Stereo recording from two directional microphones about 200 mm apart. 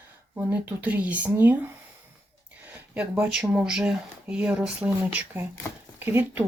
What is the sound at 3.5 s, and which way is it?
Speech, 5° right (ahead or behind).